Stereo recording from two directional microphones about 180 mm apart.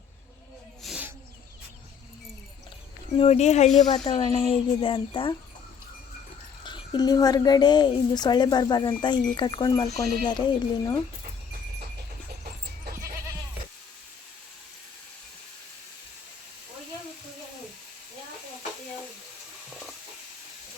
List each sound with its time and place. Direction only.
0.8 s snake: centre (ahead or behind)
3.2 s speech: 35° left (ahead or behind)
3.8 s a woman's voice: 25° left (ahead or behind)
6.7 s a woman's voice: 25° left (ahead or behind)